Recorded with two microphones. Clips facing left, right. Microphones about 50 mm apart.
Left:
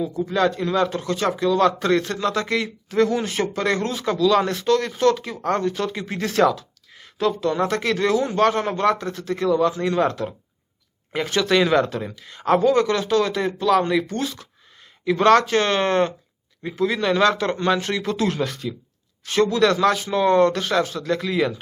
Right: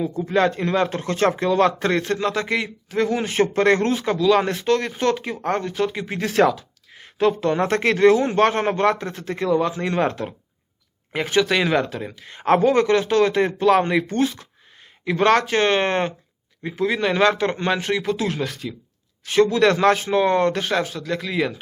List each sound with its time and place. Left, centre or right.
0.0 s speech: right; by 3.3 s centre
3.3 s speech: right
11.1 s speech: centre
12.1 s speech: right
19.5 s speech: right; by 21.5 s centre